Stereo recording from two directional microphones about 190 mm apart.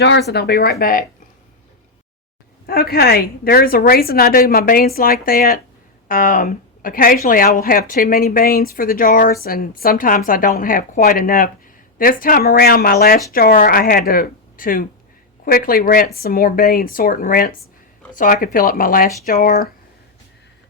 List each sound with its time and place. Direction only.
0.0 s speech: 65° left (ahead or behind)
2.6 s speech: 55° left (ahead or behind)